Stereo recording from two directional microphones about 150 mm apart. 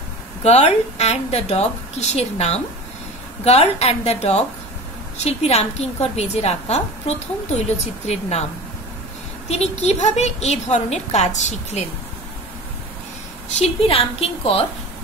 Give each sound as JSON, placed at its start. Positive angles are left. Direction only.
{"t": 0.4, "sound": "a woman's voice", "side_deg": 45}
{"t": 9.5, "sound": "a woman's voice", "side_deg": 45}
{"t": 13.6, "sound": "a woman's voice", "side_deg": 40}